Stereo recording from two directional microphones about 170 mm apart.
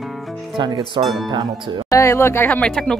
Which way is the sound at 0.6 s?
30° right (ahead or behind).